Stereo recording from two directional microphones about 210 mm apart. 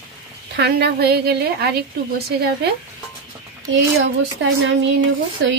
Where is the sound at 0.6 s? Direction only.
50° right (ahead or behind).